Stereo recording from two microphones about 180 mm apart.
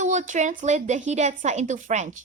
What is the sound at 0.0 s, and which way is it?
A woman's voice, 45° right (ahead or behind).